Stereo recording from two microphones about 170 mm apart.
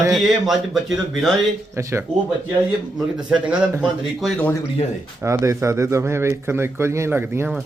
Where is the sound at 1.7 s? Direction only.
15° right (ahead or behind).